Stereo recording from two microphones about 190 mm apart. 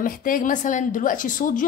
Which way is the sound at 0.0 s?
45° left (ahead or behind).